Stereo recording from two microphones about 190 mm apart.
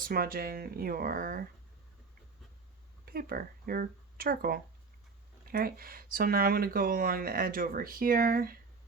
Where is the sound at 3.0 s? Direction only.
50° right (ahead or behind).